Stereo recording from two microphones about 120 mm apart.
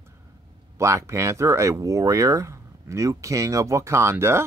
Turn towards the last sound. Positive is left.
turn(degrees=-20)  # may be behind; listen again after turning